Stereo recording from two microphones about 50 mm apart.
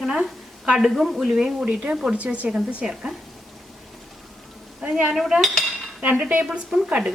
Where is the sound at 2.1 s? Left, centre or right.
Right.